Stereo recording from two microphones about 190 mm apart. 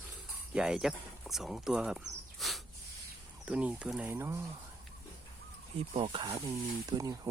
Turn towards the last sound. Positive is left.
turn(degrees=-20)  # may be behind; listen again after turning